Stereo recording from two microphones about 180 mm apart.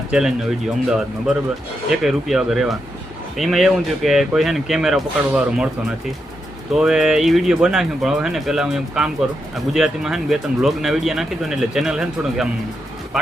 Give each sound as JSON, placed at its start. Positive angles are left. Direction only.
{"t": 0.1, "sound": "speech", "side_deg": -5}
{"t": 6.7, "sound": "speech", "side_deg": -5}